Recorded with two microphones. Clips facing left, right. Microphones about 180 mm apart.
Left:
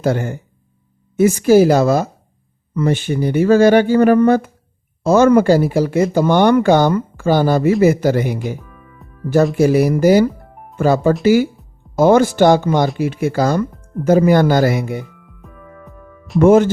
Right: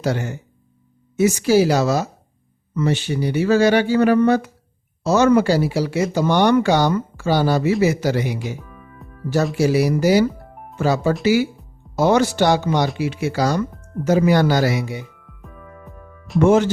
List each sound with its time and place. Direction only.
0.0 s speech: 50° left (ahead or behind)
8.5 s music: centre (ahead or behind)
9.6 s speech: 50° left (ahead or behind)
10.4 s music: centre (ahead or behind)
10.8 s speech: 50° left (ahead or behind)
15.4 s music: centre (ahead or behind)
16.4 s speech: 50° left (ahead or behind)